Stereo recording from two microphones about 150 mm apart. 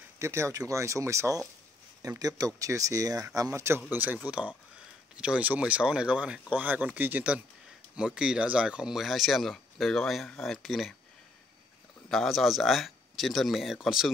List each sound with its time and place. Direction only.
0.2 s speech: 20° right (ahead or behind); by 11.0 s centre (ahead or behind)
12.1 s speech: centre (ahead or behind)